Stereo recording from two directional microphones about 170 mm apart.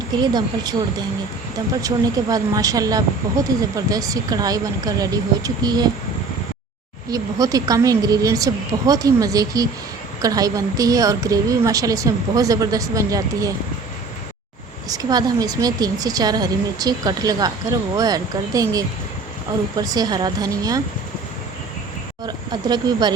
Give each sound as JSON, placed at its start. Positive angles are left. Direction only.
{"t": 0.2, "sound": "speech", "side_deg": -25}
{"t": 1.8, "sound": "speech", "side_deg": -20}
{"t": 7.1, "sound": "speech", "side_deg": -20}
{"t": 14.8, "sound": "speech", "side_deg": -20}
{"t": 22.3, "sound": "speech", "side_deg": -25}